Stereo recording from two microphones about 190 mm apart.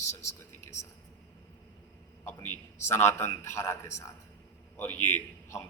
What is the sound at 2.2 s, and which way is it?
A man's voice, 15° left (ahead or behind).